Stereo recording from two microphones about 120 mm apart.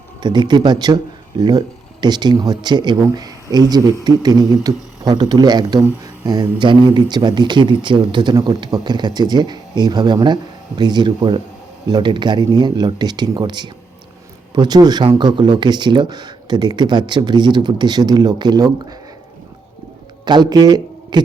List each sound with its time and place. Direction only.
0.2 s speech: 40° right (ahead or behind)
20.2 s a man's voice: 35° right (ahead or behind)